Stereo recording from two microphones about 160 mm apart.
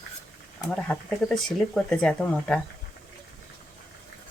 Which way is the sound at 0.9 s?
5° left (ahead or behind).